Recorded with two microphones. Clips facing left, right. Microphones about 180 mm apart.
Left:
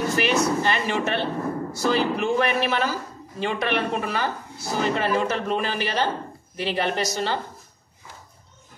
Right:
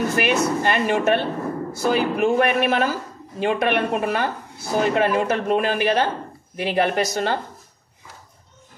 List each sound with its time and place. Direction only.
0.1 s a man's voice: 55° right (ahead or behind)